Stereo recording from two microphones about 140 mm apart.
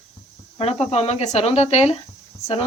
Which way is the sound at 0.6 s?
45° left (ahead or behind).